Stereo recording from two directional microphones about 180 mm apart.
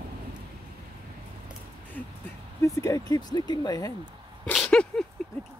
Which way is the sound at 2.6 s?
15° left (ahead or behind).